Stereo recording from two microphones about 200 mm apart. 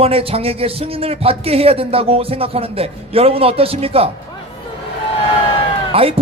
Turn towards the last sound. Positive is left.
turn(degrees=-30)  # may be behind; listen again after turning